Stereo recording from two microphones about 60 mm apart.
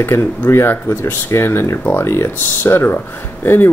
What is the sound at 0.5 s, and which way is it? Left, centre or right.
Speech, left.